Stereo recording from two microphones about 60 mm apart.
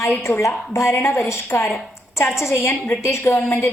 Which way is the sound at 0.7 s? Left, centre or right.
Left.